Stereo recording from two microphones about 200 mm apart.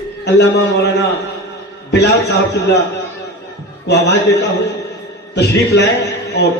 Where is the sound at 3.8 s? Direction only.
60° left (ahead or behind).